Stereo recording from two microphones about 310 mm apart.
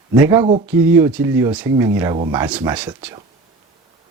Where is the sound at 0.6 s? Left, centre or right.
Centre.